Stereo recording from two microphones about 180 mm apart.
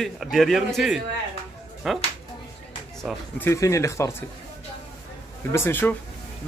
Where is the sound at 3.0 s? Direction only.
10° left (ahead or behind).